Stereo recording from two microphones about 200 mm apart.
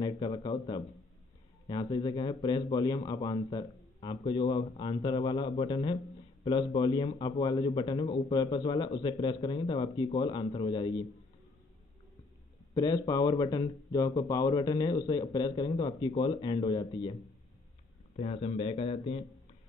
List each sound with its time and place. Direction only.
0.0 s a man's voice: 25° left (ahead or behind)
12.7 s a man's voice: 20° left (ahead or behind)